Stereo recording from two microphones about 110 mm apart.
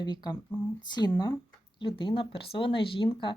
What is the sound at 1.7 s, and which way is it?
Speech, 50° left (ahead or behind).